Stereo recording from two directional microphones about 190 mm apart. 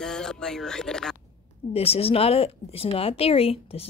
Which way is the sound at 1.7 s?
30° left (ahead or behind).